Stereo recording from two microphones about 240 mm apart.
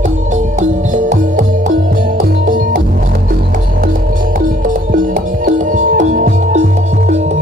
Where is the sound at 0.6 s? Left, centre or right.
Right.